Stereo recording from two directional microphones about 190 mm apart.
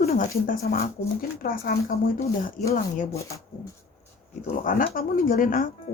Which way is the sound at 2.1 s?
15° left (ahead or behind).